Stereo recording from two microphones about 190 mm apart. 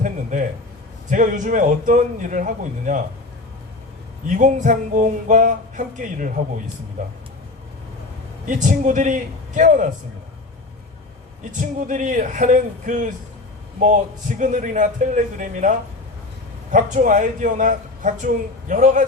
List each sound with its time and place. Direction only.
0.0 s a sound: 40° right (ahead or behind)
1.1 s a man's voice: 40° right (ahead or behind)
4.3 s speech: 40° right (ahead or behind)
8.4 s speech: 40° right (ahead or behind)
11.9 s a man's voice: 40° right (ahead or behind)
14.3 s a man's voice: 40° right (ahead or behind)
16.7 s a man's voice: 40° right (ahead or behind)